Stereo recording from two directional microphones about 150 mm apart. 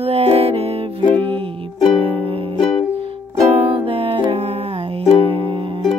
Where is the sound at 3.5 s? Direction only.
40° right (ahead or behind).